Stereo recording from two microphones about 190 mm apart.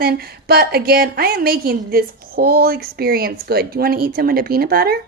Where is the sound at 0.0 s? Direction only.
55° right (ahead or behind).